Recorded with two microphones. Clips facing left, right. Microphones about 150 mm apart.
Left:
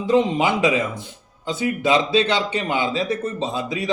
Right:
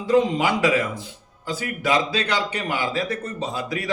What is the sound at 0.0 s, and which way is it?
A man's voice, 20° left (ahead or behind).